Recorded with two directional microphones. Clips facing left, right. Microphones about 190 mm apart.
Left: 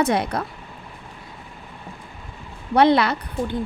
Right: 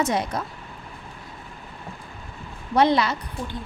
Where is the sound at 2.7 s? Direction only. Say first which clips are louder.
Left 3 dB; 60° left (ahead or behind).